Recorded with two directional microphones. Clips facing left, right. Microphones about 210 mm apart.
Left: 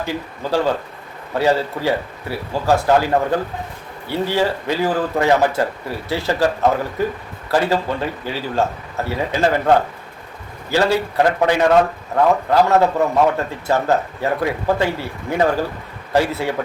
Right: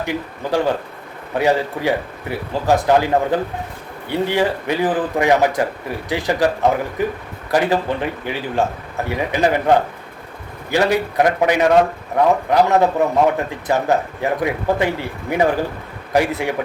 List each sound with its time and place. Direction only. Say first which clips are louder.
0.0 s a man's voice: right 1 dB; 15° right (ahead or behind)